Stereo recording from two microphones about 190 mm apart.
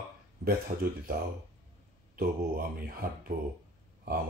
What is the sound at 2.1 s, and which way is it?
Speech, 50° right (ahead or behind).